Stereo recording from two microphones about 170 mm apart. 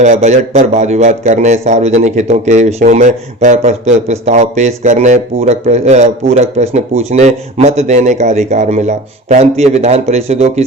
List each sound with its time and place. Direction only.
0.0 s a man's voice: 40° right (ahead or behind)